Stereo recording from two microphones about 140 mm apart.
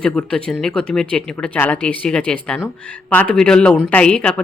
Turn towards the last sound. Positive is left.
turn(degrees=5)  # may be behind; listen again after turning